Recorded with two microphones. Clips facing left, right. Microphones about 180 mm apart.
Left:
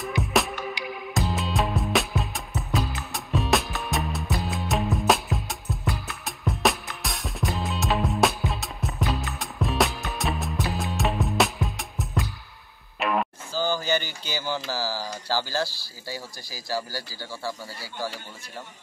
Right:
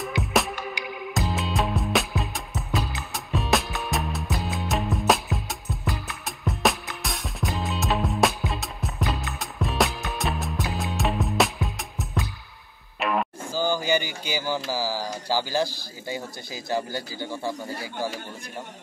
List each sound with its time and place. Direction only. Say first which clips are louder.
0.0 s music: even; centre (ahead or behind)
13.5 s a sound: right 2 dB; 15° right (ahead or behind)
14.7 s speech: right 2 dB; 15° right (ahead or behind)